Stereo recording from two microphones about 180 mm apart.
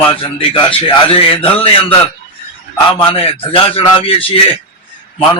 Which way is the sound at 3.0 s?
30° left (ahead or behind).